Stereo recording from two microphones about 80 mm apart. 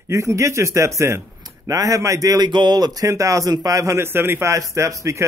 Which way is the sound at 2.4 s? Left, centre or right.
Right.